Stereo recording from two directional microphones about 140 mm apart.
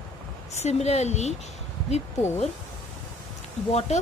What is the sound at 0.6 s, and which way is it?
Speech, 50° left (ahead or behind).